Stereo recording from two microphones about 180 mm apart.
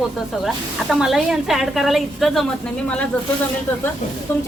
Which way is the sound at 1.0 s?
Centre (ahead or behind).